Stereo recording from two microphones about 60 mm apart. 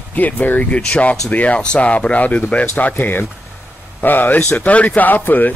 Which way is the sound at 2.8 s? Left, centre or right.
Left.